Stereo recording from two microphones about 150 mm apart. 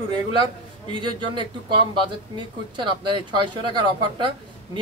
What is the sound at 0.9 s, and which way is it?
A man's voice, 30° right (ahead or behind).